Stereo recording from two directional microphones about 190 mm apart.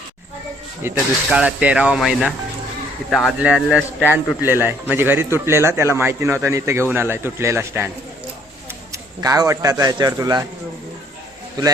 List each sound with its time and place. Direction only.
0.8 s a man's voice: 10° right (ahead or behind)
8.9 s a man's voice: 20° right (ahead or behind)